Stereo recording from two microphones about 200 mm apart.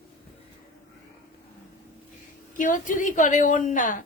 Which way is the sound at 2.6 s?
40° left (ahead or behind).